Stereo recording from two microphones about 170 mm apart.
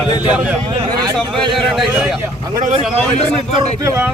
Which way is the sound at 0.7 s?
25° right (ahead or behind).